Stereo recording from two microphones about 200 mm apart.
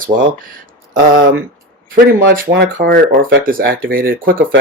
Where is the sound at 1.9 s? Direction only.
45° right (ahead or behind).